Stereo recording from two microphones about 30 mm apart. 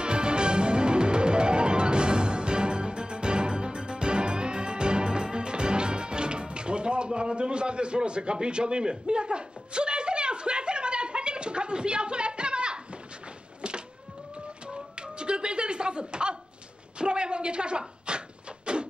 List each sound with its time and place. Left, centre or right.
0.0 s music: right
13.6 s power windows: right
14.7 s music: right
17.0 s a sound: right